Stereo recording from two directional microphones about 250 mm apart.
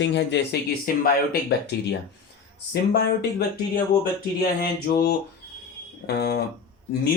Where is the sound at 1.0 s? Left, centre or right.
Left.